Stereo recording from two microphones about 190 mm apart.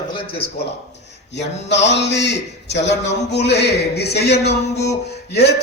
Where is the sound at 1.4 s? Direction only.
65° left (ahead or behind).